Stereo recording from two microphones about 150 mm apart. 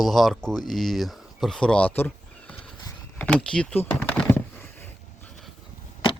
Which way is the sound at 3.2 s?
5° left (ahead or behind).